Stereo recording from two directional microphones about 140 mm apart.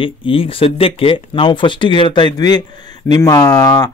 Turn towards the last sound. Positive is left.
turn(degrees=25)  # may be behind; listen again after turning